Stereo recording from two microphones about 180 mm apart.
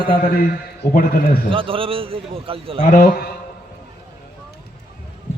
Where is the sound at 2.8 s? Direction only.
50° left (ahead or behind).